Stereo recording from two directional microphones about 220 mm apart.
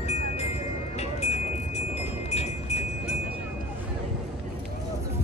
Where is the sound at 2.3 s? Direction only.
30° left (ahead or behind).